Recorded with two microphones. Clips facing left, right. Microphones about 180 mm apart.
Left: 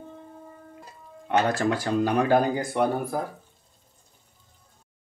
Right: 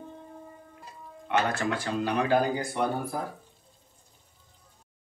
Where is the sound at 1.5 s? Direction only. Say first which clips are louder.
Left 5 dB; 40° left (ahead or behind).